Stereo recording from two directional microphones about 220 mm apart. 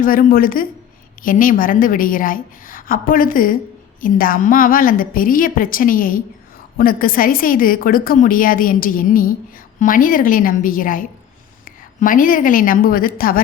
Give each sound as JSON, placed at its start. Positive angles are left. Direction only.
{"t": 0.0, "sound": "a woman's voice", "side_deg": 40}